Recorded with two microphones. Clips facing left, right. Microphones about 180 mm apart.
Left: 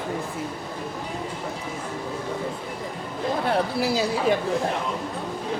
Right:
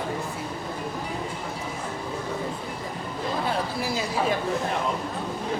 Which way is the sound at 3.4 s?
75° left (ahead or behind).